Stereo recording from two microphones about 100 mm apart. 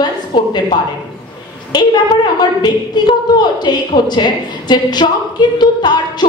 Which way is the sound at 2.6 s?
45° left (ahead or behind).